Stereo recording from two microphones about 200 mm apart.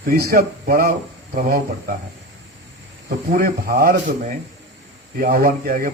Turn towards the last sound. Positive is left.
turn(degrees=-45)  # may be behind; listen again after turning